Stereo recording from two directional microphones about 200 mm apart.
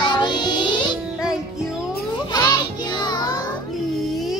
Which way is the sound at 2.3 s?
20° left (ahead or behind).